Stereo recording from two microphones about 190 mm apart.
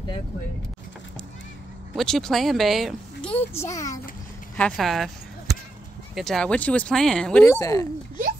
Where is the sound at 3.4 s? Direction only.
15° left (ahead or behind).